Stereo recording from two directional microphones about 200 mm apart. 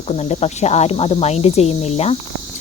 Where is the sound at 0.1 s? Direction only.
35° left (ahead or behind).